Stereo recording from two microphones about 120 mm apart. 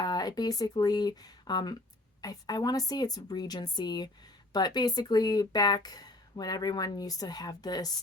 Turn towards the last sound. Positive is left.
turn(degrees=35)  # may be behind; listen again after turning